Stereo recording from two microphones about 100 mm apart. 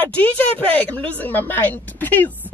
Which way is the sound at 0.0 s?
15° left (ahead or behind).